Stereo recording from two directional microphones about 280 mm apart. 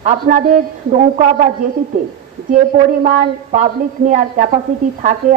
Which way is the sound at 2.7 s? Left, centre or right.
Right.